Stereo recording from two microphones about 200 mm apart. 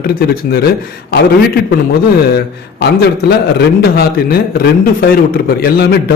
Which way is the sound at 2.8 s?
50° left (ahead or behind).